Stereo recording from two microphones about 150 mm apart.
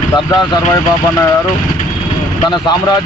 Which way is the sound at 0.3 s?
25° left (ahead or behind).